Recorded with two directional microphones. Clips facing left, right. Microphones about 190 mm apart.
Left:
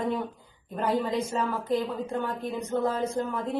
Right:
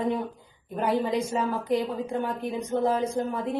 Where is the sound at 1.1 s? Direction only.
10° right (ahead or behind).